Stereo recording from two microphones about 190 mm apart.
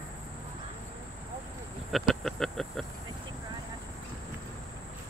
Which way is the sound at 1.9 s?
Centre (ahead or behind).